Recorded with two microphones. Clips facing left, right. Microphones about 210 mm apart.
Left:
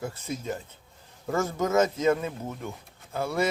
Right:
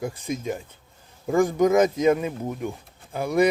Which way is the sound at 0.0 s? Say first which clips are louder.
Right 5 dB; 15° right (ahead or behind).